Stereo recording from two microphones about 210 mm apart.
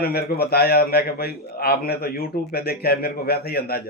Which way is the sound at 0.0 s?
45° left (ahead or behind).